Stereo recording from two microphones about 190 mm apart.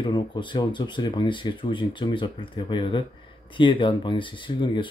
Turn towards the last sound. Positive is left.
turn(degrees=25)  # may be behind; listen again after turning